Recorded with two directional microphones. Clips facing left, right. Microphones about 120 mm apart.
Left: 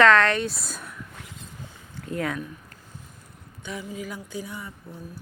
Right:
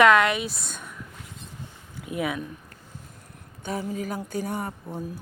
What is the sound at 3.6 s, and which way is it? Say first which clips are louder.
Speech: right 4 dB; 40° right (ahead or behind).